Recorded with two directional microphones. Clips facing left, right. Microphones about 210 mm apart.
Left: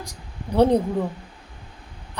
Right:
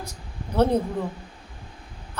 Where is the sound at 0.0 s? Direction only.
15° left (ahead or behind).